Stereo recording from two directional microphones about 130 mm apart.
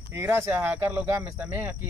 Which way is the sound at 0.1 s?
20° right (ahead or behind).